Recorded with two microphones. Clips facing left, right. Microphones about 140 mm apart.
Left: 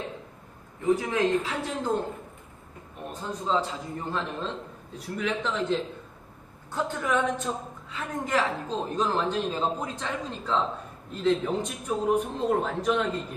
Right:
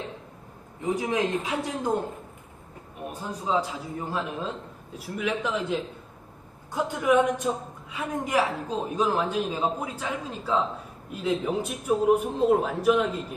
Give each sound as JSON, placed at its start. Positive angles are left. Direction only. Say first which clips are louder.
{"t": 0.9, "sound": "a man's voice", "louder": "left 2 dB", "side_deg": -20}
{"t": 3.1, "sound": "a man's voice", "louder": "even", "side_deg": -10}